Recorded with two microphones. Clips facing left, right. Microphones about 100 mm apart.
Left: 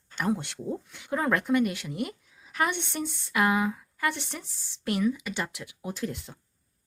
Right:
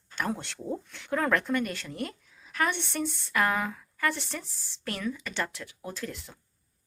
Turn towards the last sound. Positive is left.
turn(degrees=20)  # may be behind; listen again after turning